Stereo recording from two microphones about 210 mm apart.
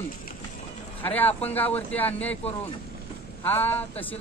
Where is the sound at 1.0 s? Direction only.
10° left (ahead or behind).